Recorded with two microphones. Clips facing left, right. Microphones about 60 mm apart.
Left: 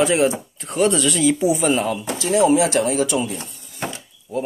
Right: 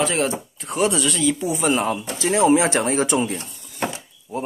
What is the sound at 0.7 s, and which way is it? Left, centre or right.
Speech, centre.